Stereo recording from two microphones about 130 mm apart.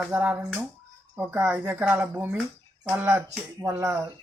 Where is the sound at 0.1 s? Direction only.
15° right (ahead or behind).